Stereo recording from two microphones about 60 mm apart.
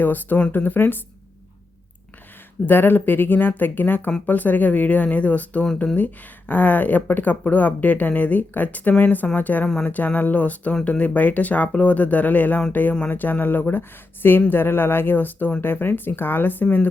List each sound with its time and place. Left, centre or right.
0.0 s speech: left
2.6 s speech: left